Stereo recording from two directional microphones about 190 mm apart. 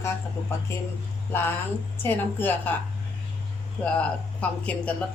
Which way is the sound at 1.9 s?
10° left (ahead or behind).